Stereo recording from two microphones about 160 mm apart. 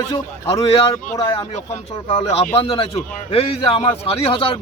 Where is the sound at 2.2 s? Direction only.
40° left (ahead or behind).